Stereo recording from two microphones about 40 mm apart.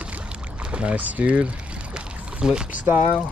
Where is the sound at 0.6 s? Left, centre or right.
Right.